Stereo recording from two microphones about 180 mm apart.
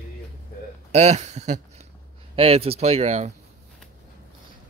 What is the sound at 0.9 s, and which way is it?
Speech, 40° right (ahead or behind).